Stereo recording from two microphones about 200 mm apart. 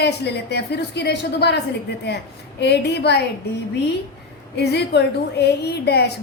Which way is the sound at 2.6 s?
55° left (ahead or behind).